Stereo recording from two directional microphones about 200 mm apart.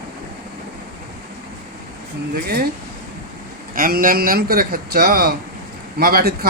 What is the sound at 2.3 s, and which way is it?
Speech, 50° right (ahead or behind).